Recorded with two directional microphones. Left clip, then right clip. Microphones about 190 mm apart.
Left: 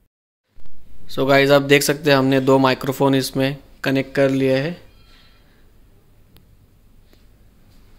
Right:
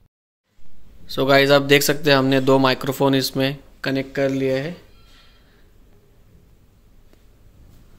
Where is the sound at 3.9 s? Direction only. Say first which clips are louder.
Left 4 dB; 20° left (ahead or behind).